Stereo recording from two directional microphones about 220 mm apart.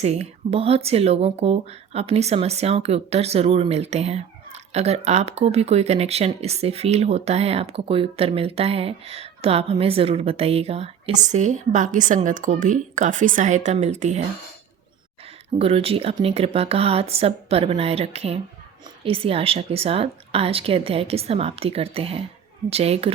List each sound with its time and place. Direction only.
0.0 s speech: 30° right (ahead or behind)
15.5 s speech: 25° right (ahead or behind)